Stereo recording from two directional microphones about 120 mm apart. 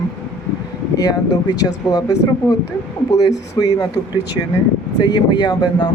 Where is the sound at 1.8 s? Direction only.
30° left (ahead or behind).